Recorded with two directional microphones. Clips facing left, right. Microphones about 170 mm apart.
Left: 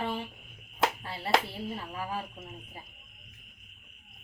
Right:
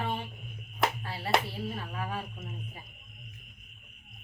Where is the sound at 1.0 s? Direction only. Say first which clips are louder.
Right 1 dB; 30° left (ahead or behind).